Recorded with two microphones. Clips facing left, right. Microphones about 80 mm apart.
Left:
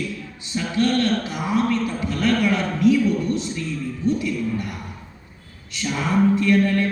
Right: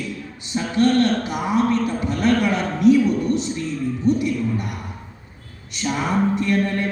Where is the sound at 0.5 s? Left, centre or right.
Right.